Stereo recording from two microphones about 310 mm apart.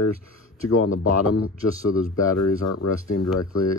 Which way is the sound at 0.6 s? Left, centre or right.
Left.